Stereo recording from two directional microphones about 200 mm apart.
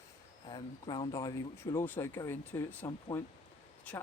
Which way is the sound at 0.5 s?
20° left (ahead or behind).